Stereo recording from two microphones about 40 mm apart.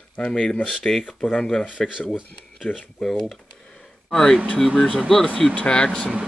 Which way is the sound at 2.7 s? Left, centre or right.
Left.